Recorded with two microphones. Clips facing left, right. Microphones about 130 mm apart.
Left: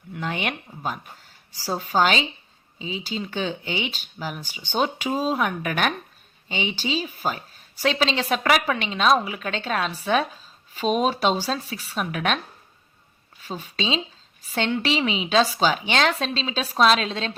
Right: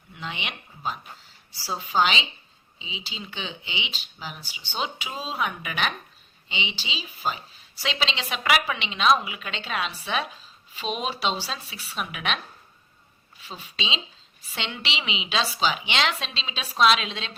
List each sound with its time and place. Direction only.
0.1 s a woman's voice: 50° left (ahead or behind)
13.4 s a woman's voice: 45° left (ahead or behind)